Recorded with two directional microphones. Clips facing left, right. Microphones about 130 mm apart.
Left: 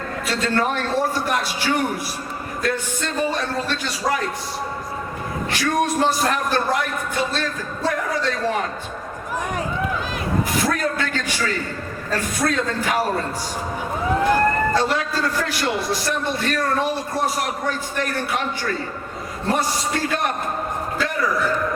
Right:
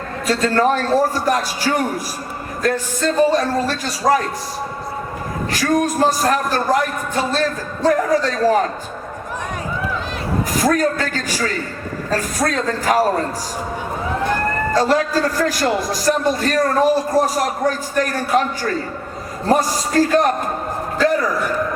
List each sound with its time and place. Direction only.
0.3 s a man's voice: 40° right (ahead or behind)
5.5 s a man's voice: 40° right (ahead or behind)
10.6 s a man's voice: 40° right (ahead or behind)
14.8 s a man's voice: 40° right (ahead or behind)